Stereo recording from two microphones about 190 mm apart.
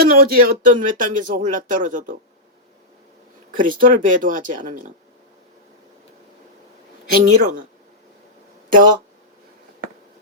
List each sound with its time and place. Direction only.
0.0 s speech: 50° right (ahead or behind)
3.6 s speech: 45° right (ahead or behind)
7.1 s speech: 50° right (ahead or behind)